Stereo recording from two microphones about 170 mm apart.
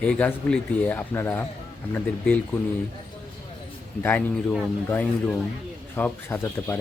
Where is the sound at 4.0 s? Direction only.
10° left (ahead or behind).